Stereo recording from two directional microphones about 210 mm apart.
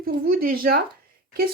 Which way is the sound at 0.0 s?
45° right (ahead or behind).